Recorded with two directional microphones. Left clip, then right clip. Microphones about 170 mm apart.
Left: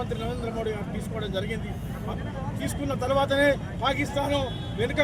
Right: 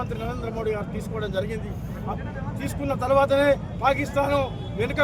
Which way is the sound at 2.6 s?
15° right (ahead or behind).